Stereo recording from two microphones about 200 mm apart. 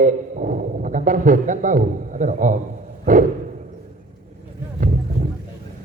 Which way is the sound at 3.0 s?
40° right (ahead or behind).